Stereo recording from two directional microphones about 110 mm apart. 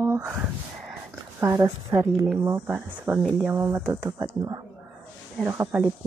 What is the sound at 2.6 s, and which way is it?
A woman's voice, 15° right (ahead or behind).